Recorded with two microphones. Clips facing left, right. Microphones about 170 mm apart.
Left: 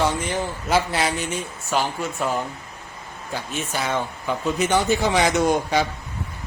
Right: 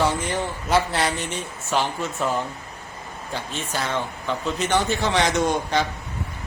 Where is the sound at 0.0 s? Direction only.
Centre (ahead or behind).